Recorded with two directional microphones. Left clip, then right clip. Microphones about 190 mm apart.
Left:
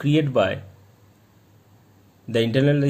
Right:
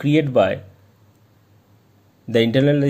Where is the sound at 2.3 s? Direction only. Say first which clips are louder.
Right 4 dB; 25° right (ahead or behind).